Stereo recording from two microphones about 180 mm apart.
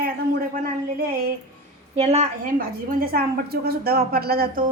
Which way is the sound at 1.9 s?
35° right (ahead or behind).